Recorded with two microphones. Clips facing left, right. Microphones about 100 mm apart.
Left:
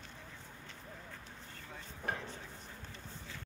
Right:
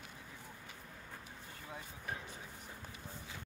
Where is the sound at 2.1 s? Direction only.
60° left (ahead or behind).